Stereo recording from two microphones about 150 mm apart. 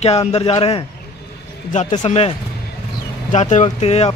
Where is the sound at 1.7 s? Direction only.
55° left (ahead or behind).